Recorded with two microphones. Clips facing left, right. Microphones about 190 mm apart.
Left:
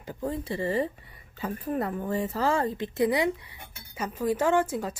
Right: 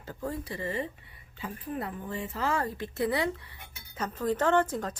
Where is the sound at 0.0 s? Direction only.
15° left (ahead or behind); by 0.9 s 35° left (ahead or behind).